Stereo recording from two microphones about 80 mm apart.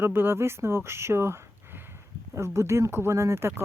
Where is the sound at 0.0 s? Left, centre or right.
Right.